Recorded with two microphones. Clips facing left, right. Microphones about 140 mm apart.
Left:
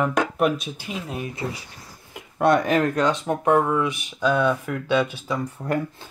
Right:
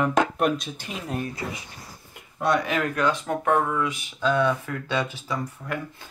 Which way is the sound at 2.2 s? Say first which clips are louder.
Left 5 dB; 60° left (ahead or behind).